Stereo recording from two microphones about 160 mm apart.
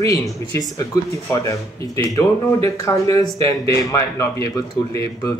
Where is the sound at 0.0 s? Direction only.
20° left (ahead or behind).